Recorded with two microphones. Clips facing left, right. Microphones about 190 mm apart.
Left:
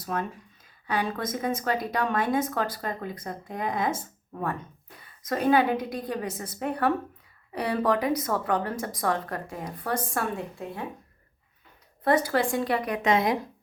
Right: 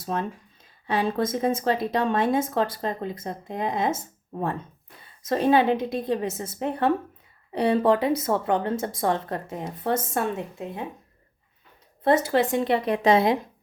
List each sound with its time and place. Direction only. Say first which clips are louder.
0.0 s speech: right 2 dB; 25° right (ahead or behind)
12.0 s speech: right 3 dB; 25° right (ahead or behind)